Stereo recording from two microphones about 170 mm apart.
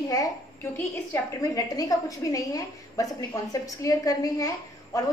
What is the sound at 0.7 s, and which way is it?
A woman's voice, 15° left (ahead or behind).